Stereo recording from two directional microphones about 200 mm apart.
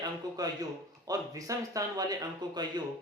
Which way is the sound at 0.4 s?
20° right (ahead or behind).